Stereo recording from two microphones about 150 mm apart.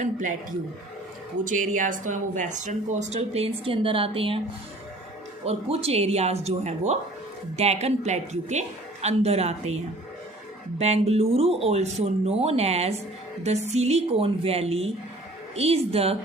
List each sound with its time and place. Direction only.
0.0 s speech: 55° right (ahead or behind)
1.5 s a woman's voice: 60° right (ahead or behind); by 4.4 s 35° right (ahead or behind)
5.5 s a woman's voice: 45° right (ahead or behind)
10.8 s a woman's voice: 45° right (ahead or behind)